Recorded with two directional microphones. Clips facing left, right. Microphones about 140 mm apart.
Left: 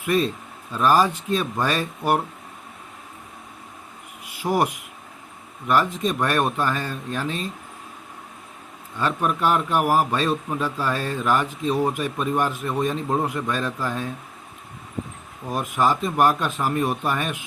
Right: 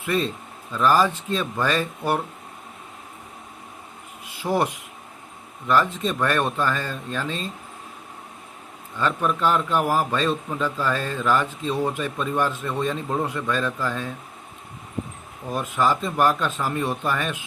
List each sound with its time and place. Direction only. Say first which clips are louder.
0.0 s a man's voice: left 3 dB; 15° left (ahead or behind)
4.4 s a man's voice: left 1 dB; 15° left (ahead or behind)
9.0 s a man's voice: even; 15° left (ahead or behind)
15.5 s a man's voice: left 1 dB; 15° left (ahead or behind)